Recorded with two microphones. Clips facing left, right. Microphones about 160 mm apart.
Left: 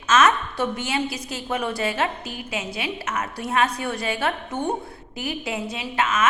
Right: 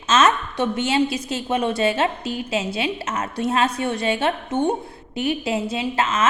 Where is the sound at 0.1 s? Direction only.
25° right (ahead or behind).